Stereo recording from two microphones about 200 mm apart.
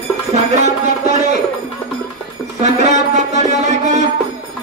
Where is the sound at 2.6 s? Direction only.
35° right (ahead or behind).